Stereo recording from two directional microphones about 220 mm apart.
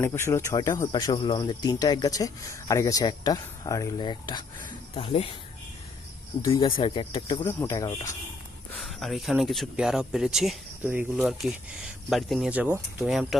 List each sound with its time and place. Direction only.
0.0 s speech: 10° left (ahead or behind)
6.5 s speech: 25° left (ahead or behind)
8.7 s speech: centre (ahead or behind)